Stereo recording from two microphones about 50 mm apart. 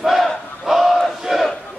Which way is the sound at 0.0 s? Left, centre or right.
Centre.